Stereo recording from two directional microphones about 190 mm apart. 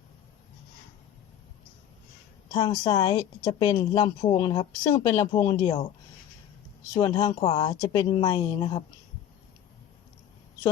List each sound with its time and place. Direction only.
2.5 s a woman's voice: 20° left (ahead or behind)
6.9 s a woman's voice: 20° left (ahead or behind)
7.3 s a woman's voice: 30° left (ahead or behind)